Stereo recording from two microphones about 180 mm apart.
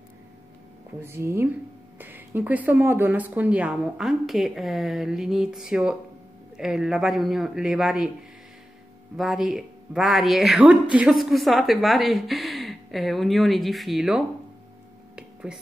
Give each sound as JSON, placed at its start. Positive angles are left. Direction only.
{"t": 1.0, "sound": "a woman's voice", "side_deg": -15}
{"t": 9.1, "sound": "a woman's voice", "side_deg": 0}
{"t": 15.1, "sound": "a sound", "side_deg": -5}